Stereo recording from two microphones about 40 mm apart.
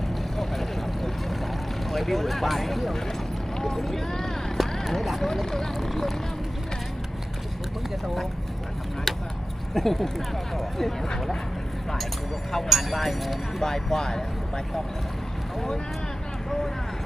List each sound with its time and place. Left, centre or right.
0.3 s vehicle: centre
1.9 s speech: centre
4.9 s speech: centre
5.2 s speech: centre
9.1 s vehicle: centre
9.7 s speech: centre
12.6 s speech: centre
13.6 s speech: centre
16.5 s speech: centre